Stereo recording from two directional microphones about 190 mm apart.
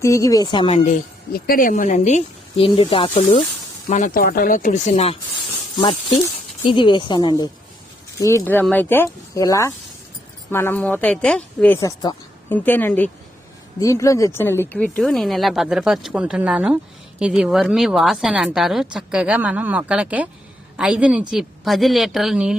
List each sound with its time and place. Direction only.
0.0 s a woman's voice: 15° left (ahead or behind)
0.9 s speech: 50° left (ahead or behind); by 3.4 s 25° left (ahead or behind)
3.8 s a woman's voice: 45° left (ahead or behind); by 22.5 s centre (ahead or behind)